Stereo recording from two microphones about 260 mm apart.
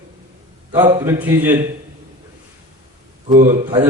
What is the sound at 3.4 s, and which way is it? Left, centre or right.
Speech, centre.